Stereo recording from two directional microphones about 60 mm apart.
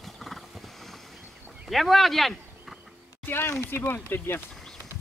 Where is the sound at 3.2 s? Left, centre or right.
Left.